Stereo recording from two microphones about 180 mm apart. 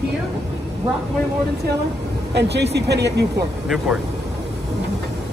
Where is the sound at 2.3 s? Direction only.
70° right (ahead or behind).